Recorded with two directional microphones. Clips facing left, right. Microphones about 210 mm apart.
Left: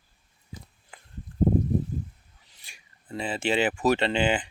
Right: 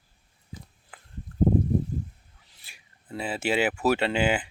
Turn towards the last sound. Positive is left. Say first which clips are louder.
# even
turn(degrees=-10)  # may be behind; listen again after turning